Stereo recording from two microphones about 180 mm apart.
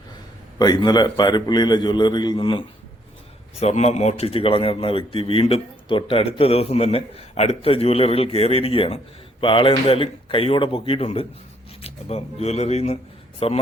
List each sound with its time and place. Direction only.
0.6 s a man's voice: 25° left (ahead or behind)
3.6 s a man's voice: 40° left (ahead or behind)